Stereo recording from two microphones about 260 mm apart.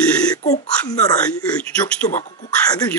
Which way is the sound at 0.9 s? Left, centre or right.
Centre.